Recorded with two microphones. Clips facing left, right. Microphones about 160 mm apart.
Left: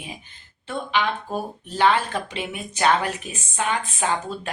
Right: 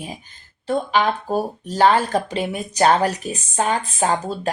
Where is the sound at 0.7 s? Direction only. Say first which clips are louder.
Right 5 dB; 40° right (ahead or behind).